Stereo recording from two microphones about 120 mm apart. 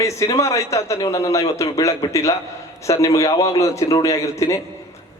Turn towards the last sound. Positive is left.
turn(degrees=25)  # may be behind; listen again after turning